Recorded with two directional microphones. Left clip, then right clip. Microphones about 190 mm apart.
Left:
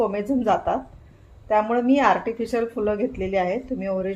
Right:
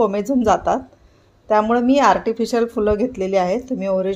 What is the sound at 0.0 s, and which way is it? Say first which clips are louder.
Speech: right 5 dB; 50° right (ahead or behind).